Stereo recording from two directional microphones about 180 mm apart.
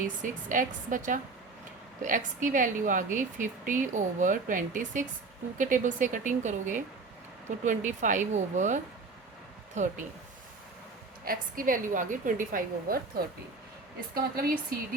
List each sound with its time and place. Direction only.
0.2 s speech: 45° right (ahead or behind)
11.3 s speech: 50° right (ahead or behind)